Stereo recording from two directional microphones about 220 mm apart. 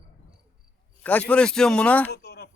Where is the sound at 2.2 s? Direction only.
45° left (ahead or behind).